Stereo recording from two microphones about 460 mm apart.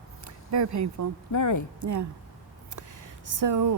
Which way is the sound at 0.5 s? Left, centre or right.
Right.